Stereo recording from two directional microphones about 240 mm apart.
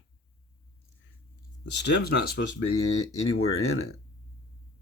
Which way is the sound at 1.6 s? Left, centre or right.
Left.